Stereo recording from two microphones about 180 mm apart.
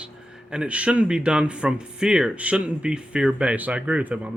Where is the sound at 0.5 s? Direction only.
5° right (ahead or behind).